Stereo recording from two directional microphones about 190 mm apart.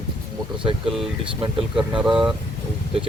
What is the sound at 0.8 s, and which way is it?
Speech, centre (ahead or behind).